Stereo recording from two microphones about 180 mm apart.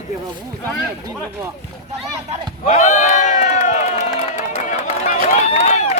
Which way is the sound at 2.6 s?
40° left (ahead or behind).